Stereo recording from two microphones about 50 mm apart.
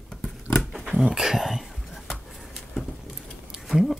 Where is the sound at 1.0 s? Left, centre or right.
Centre.